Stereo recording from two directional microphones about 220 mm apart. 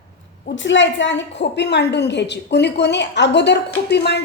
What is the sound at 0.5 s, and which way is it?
A woman's voice, 55° left (ahead or behind).